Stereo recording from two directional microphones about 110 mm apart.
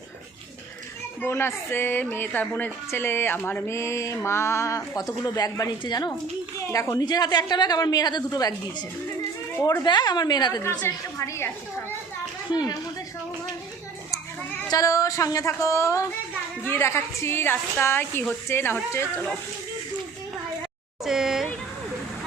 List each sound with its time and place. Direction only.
1.2 s speech: 25° left (ahead or behind)
2.9 s mantra: 20° left (ahead or behind); by 6.1 s 40° left (ahead or behind)
6.7 s a woman's voice: 30° left (ahead or behind)
9.8 s a woman's voice: 40° left (ahead or behind)
10.8 s mantra: 25° left (ahead or behind)
14.7 s a woman's voice: 30° left (ahead or behind)
16.6 s mantra: 25° left (ahead or behind)
21.0 s speech: 5° right (ahead or behind)